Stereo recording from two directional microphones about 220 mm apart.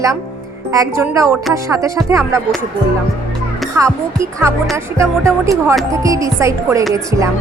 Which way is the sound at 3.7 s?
15° right (ahead or behind).